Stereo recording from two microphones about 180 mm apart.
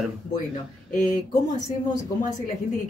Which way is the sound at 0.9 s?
50° left (ahead or behind).